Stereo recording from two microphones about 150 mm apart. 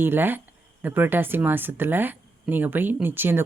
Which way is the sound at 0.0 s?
15° right (ahead or behind).